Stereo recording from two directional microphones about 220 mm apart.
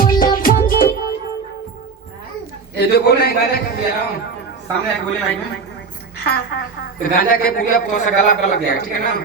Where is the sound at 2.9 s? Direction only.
45° left (ahead or behind).